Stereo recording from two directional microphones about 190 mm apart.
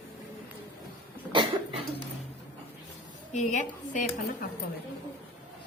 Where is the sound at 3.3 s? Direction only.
40° left (ahead or behind).